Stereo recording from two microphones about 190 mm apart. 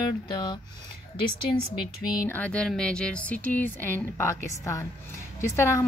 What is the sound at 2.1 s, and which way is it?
Speech, 15° left (ahead or behind).